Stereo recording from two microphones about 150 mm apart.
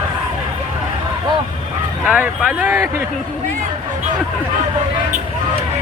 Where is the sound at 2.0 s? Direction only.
5° right (ahead or behind).